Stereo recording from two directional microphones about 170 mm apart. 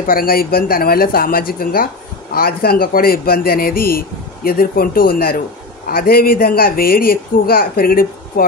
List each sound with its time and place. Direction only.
0.0 s speech: 60° left (ahead or behind)